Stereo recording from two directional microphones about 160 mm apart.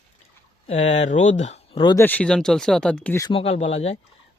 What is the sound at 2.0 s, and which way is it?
Speech, 10° left (ahead or behind).